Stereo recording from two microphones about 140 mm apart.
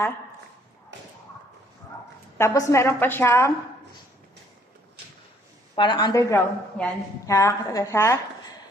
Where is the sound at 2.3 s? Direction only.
20° left (ahead or behind).